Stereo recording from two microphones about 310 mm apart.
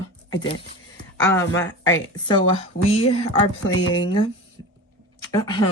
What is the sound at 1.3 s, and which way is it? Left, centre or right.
Speech, centre.